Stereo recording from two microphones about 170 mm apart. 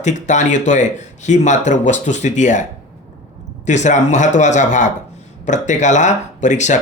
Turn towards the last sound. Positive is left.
turn(degrees=45)  # may be behind; listen again after turning